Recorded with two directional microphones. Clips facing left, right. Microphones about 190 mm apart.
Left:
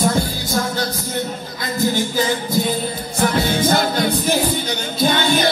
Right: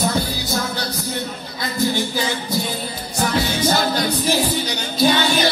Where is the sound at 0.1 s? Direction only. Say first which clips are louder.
Left 2 dB; 50° left (ahead or behind).